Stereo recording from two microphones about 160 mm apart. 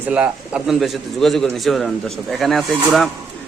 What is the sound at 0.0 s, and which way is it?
A man's voice, 5° right (ahead or behind).